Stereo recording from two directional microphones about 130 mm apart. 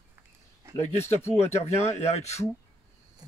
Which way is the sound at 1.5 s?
55° left (ahead or behind).